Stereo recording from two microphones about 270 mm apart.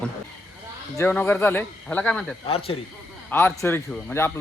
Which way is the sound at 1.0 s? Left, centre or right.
Centre.